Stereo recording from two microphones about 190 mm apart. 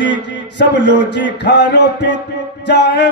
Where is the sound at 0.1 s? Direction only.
70° left (ahead or behind).